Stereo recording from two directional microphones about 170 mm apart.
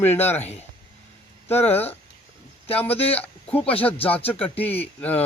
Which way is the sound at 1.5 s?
35° left (ahead or behind).